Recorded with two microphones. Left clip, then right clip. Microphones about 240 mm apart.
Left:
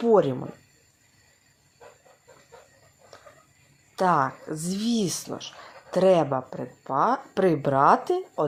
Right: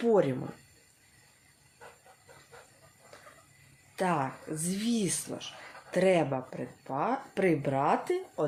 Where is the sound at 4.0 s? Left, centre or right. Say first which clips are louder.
Left 8 dB; centre.